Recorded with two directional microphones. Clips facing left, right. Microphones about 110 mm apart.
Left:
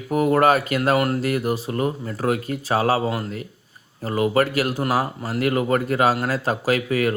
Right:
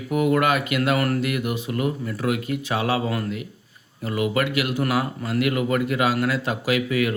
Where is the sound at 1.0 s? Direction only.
25° left (ahead or behind).